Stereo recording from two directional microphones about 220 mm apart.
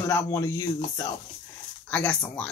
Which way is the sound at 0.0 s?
10° left (ahead or behind).